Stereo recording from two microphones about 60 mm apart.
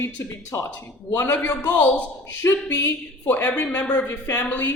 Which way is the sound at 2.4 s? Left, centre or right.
Left.